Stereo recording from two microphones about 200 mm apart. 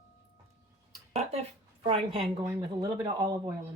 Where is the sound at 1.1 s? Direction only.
30° right (ahead or behind).